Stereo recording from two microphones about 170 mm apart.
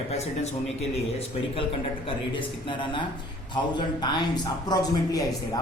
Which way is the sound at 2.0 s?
30° left (ahead or behind).